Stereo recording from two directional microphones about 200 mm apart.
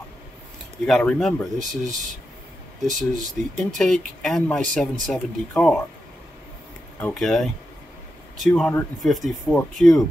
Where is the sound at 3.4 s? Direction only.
40° right (ahead or behind).